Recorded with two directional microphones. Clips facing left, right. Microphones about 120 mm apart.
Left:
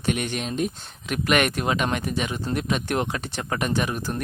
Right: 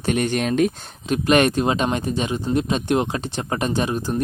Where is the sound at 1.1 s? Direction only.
30° right (ahead or behind).